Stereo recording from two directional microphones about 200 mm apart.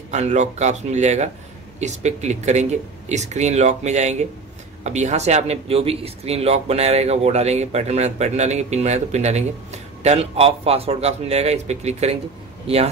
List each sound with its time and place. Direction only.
0.1 s a man's voice: 35° right (ahead or behind)